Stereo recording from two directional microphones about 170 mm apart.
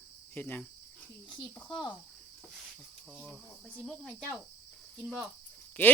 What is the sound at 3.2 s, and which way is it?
Speech, 5° left (ahead or behind).